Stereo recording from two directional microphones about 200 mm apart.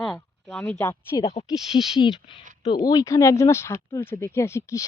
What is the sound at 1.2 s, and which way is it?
Speech, 30° left (ahead or behind).